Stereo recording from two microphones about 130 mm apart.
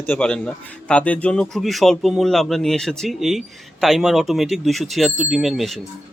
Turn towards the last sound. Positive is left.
turn(degrees=0)  # may be behind; listen again after turning